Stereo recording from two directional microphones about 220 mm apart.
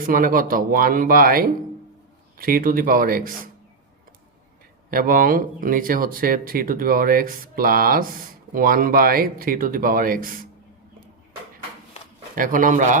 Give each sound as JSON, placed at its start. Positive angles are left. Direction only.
{"t": 0.0, "sound": "speech", "side_deg": -40}
{"t": 4.9, "sound": "speech", "side_deg": -40}
{"t": 12.4, "sound": "speech", "side_deg": -40}